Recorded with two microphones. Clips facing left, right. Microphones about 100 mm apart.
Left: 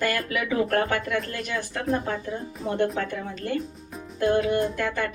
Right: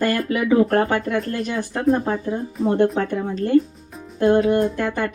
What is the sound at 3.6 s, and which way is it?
Music, centre (ahead or behind).